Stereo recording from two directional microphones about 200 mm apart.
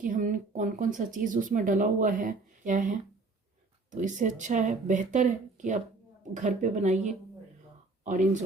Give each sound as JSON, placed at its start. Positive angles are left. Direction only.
{"t": 0.0, "sound": "speech", "side_deg": -40}